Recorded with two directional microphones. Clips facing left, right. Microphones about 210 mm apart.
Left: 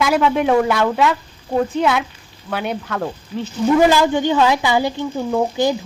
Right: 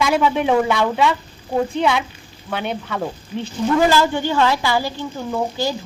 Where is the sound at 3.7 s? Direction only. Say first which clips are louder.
Left 3 dB; 15° left (ahead or behind).